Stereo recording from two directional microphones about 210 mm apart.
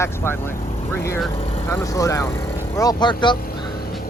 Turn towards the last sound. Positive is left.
turn(degrees=20)  # may be behind; listen again after turning